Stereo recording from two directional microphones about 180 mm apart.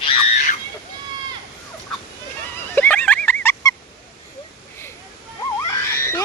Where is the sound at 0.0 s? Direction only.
30° left (ahead or behind).